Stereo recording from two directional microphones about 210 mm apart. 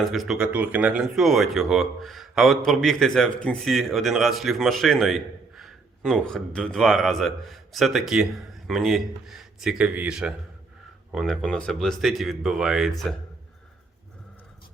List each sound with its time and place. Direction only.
0.0 s speech: centre (ahead or behind)